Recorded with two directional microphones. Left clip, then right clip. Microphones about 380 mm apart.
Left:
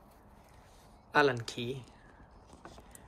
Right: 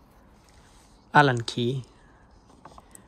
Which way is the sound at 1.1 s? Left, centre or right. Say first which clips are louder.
Right 8 dB; centre.